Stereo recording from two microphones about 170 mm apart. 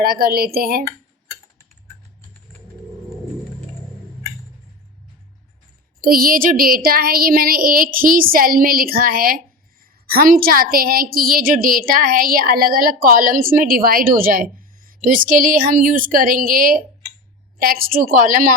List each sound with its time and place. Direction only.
0.0 s a woman's voice: 65° right (ahead or behind)
0.9 s tick-tock: 20° left (ahead or behind)
6.0 s a woman's voice: 60° right (ahead or behind)